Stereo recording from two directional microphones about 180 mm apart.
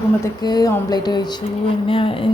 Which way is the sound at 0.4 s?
25° left (ahead or behind).